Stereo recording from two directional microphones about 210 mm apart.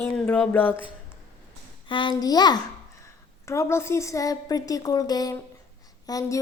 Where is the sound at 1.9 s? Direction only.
25° left (ahead or behind).